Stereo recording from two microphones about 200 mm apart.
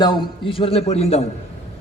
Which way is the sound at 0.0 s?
25° left (ahead or behind).